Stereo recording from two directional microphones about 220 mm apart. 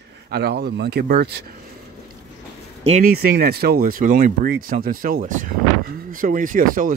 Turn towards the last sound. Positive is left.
turn(degrees=-40)  # may be behind; listen again after turning